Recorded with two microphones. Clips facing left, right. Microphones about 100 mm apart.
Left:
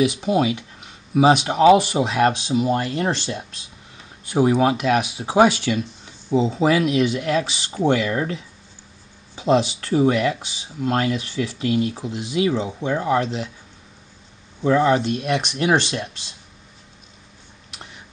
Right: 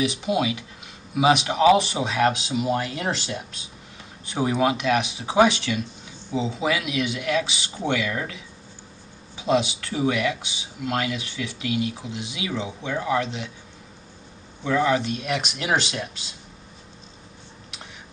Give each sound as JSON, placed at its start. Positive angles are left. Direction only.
{"t": 0.0, "sound": "speech", "side_deg": 35}
{"t": 4.3, "sound": "speech", "side_deg": 30}
{"t": 14.6, "sound": "speech", "side_deg": 35}